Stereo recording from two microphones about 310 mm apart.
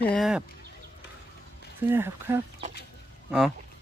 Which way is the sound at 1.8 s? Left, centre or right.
Centre.